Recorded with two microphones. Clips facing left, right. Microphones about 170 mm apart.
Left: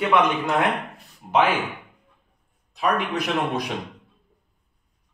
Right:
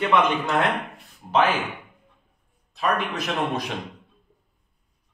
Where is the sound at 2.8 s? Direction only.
15° left (ahead or behind).